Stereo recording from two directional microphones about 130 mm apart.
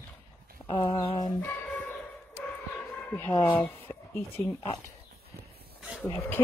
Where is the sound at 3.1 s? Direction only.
15° left (ahead or behind).